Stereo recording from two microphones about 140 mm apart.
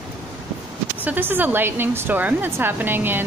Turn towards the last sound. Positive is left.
turn(degrees=-15)  # may be behind; listen again after turning